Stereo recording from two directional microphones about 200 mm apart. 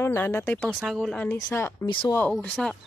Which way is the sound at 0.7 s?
5° right (ahead or behind).